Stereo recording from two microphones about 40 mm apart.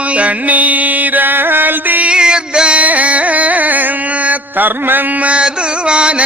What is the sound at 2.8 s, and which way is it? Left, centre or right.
Carnatic music, right.